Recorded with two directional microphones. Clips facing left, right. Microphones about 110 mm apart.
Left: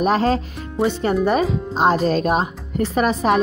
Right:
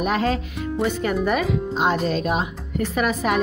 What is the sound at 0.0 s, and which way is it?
Speech, 35° left (ahead or behind).